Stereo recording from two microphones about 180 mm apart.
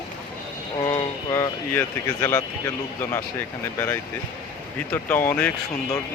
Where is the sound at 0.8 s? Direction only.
15° left (ahead or behind).